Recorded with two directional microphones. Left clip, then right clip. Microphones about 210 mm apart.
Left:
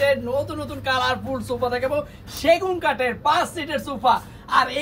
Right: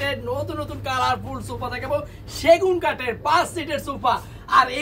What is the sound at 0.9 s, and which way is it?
Speech, 20° right (ahead or behind).